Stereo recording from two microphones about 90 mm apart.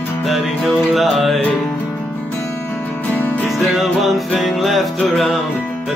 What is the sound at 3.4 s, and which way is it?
Music, centre (ahead or behind).